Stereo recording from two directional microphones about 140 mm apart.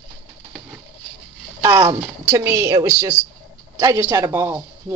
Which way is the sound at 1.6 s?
25° right (ahead or behind).